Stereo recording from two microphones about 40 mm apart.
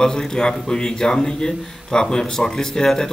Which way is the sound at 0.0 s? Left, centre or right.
Centre.